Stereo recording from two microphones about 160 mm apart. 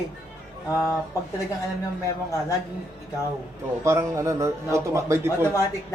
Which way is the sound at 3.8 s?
20° right (ahead or behind).